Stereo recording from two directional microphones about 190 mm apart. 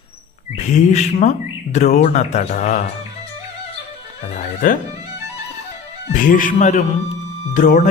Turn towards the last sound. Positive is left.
turn(degrees=40)  # may be behind; listen again after turning